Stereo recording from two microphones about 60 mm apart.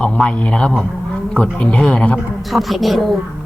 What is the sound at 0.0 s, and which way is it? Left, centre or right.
Speech, centre.